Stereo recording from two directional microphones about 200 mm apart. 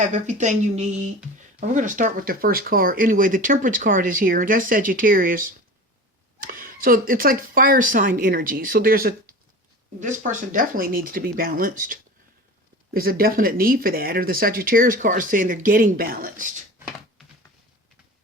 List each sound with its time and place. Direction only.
0.0 s a woman's voice: 35° right (ahead or behind)